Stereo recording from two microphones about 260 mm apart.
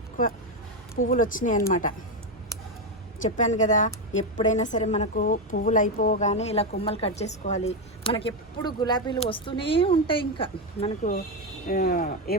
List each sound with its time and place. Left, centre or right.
1.0 s speech: left
3.2 s a woman's voice: left
11.7 s speech: left